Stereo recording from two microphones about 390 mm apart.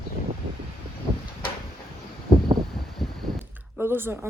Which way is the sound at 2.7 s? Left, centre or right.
Centre.